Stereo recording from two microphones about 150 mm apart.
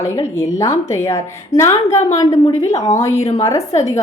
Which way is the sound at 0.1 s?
20° left (ahead or behind).